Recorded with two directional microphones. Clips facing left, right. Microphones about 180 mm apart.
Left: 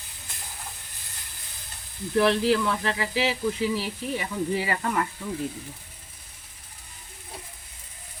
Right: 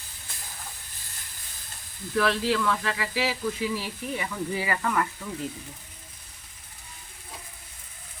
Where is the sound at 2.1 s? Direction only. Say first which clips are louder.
Left 4 dB; 25° left (ahead or behind).